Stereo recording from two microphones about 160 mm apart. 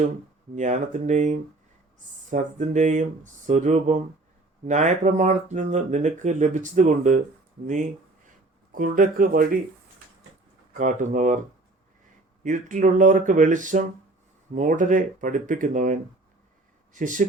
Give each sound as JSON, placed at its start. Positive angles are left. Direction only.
{"t": 0.5, "sound": "speech", "side_deg": -50}
{"t": 8.7, "sound": "speech", "side_deg": -60}
{"t": 10.8, "sound": "speech", "side_deg": -50}
{"t": 12.4, "sound": "speech", "side_deg": -55}